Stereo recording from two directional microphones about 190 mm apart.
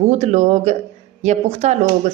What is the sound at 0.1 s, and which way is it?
Speech, 35° right (ahead or behind).